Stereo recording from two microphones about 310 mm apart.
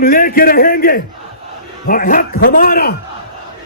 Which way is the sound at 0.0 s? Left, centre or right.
Left.